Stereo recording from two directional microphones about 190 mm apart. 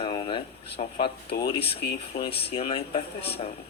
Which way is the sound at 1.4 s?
30° left (ahead or behind).